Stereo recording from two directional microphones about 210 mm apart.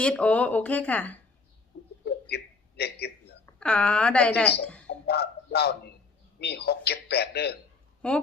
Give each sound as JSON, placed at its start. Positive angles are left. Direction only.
{"t": 0.0, "sound": "speech", "side_deg": 5}
{"t": 2.3, "sound": "a sound", "side_deg": 50}
{"t": 3.6, "sound": "a woman's voice", "side_deg": 5}
{"t": 4.9, "sound": "a man's voice", "side_deg": 50}
{"t": 8.0, "sound": "a woman's voice", "side_deg": 5}